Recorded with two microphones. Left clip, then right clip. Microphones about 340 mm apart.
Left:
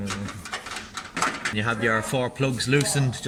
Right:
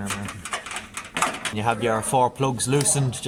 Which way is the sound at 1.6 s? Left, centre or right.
Right.